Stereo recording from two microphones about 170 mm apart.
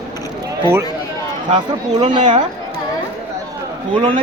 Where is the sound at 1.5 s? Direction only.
30° right (ahead or behind).